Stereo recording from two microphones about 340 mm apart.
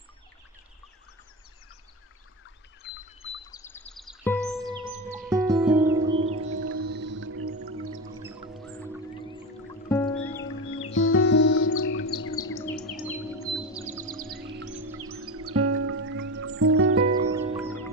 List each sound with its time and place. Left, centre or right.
3.5 s music: centre
5.3 s music: centre
6.5 s music: right
6.8 s music: right
9.8 s music: centre
10.7 s music: left
13.5 s music: centre
14.0 s music: right
15.0 s music: right
17.3 s music: centre